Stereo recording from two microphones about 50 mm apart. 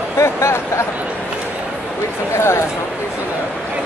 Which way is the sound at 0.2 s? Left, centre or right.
Left.